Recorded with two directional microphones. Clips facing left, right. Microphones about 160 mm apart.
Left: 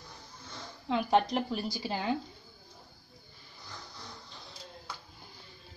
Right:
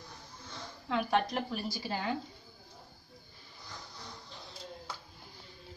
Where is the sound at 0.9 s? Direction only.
20° left (ahead or behind).